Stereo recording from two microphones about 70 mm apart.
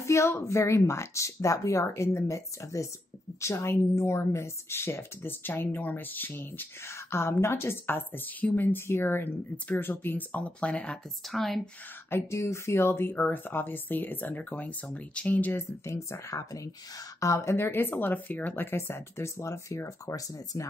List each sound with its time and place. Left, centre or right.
0.0 s a woman's voice: left
3.3 s a woman's voice: left; by 11.0 s centre
11.2 s speech: centre
12.1 s a woman's voice: left
16.1 s a woman's voice: left